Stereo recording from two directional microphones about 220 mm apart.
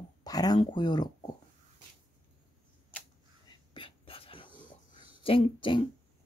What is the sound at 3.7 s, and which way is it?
Whispering, 25° left (ahead or behind).